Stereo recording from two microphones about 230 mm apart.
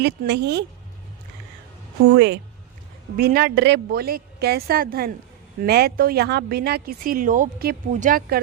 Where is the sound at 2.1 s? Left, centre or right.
Right.